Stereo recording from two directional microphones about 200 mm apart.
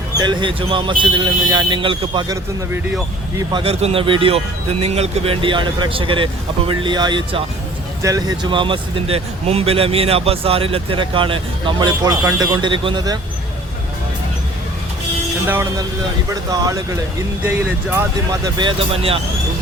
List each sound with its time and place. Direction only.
0.2 s speech: 20° right (ahead or behind)
16.3 s speech: 20° right (ahead or behind)